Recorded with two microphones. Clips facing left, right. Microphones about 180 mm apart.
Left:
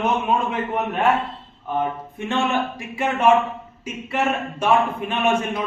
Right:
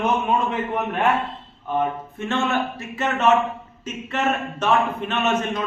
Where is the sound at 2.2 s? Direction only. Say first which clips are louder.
Left 1 dB; 15° left (ahead or behind).